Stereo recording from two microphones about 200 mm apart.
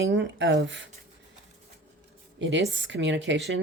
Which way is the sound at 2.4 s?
65° right (ahead or behind).